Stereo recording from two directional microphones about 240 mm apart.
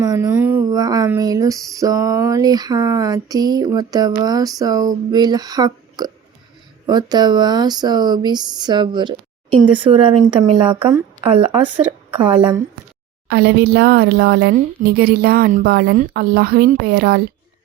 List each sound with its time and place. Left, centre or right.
0.0 s a sound: centre
6.8 s speech: centre
13.2 s speech: right